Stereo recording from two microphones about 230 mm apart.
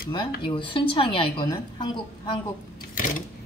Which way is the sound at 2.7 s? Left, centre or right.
Left.